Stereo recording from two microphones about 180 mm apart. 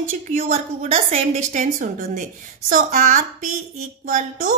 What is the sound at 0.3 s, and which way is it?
A woman's voice, 35° right (ahead or behind).